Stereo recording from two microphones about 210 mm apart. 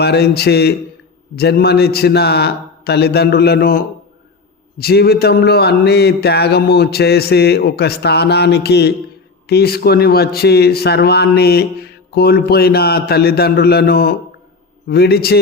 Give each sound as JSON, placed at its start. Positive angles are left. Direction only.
{"t": 0.0, "sound": "a man's voice", "side_deg": 50}